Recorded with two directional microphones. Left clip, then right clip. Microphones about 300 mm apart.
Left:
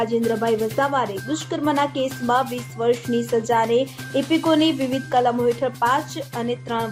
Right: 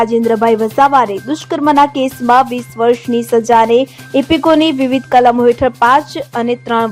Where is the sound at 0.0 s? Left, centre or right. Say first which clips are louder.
Right 10 dB; right.